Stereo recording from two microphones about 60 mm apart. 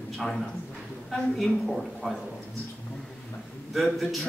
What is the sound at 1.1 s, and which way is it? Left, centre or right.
Speech, centre.